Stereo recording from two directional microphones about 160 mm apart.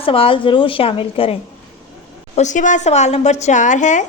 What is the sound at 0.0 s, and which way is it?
A woman's voice, 35° left (ahead or behind).